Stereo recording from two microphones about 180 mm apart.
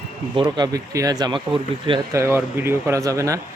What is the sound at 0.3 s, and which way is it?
Speech, 25° right (ahead or behind).